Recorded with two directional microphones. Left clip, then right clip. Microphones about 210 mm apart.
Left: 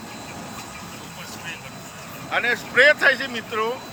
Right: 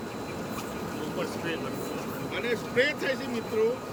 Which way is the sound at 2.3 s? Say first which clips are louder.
Left 9 dB; 5° right (ahead or behind).